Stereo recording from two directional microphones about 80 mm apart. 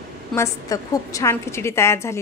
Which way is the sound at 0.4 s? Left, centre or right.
Left.